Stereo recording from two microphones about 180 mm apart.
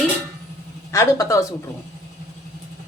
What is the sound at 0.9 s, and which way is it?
Speech, 20° left (ahead or behind).